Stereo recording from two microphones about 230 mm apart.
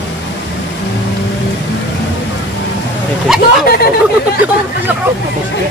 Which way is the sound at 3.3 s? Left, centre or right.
Centre.